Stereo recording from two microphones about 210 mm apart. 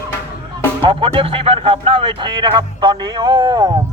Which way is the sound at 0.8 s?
25° right (ahead or behind).